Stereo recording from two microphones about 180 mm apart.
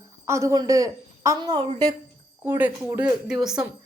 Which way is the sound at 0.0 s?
15° right (ahead or behind).